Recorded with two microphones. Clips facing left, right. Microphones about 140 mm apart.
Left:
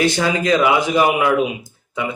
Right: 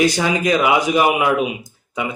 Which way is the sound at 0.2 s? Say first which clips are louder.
Left 1 dB; 15° right (ahead or behind).